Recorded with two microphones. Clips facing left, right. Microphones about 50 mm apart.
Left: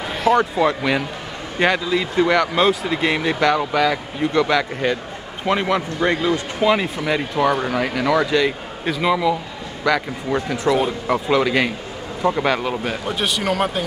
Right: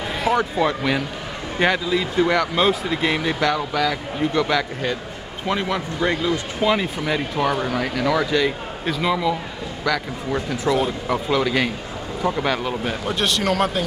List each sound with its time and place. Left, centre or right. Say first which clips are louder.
0.3 s speech: left 4 dB; centre
5.5 s a man's voice: left 4 dB; left
6.6 s a man's voice: left 2 dB; centre